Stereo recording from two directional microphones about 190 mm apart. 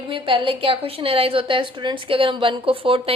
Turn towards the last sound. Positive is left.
turn(degrees=-30)  # may be behind; listen again after turning